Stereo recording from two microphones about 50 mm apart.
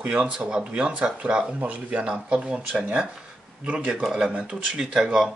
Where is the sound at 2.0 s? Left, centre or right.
Centre.